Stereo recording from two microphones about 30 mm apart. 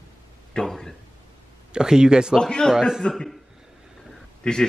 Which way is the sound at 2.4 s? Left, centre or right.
Left.